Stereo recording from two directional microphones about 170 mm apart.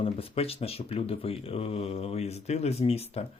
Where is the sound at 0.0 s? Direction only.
35° left (ahead or behind).